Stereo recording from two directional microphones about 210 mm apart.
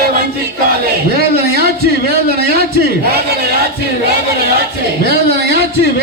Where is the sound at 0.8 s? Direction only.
50° right (ahead or behind).